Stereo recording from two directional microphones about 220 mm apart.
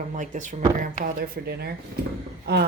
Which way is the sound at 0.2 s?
35° right (ahead or behind).